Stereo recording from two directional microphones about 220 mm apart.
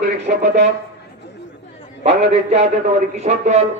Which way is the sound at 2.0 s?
30° right (ahead or behind).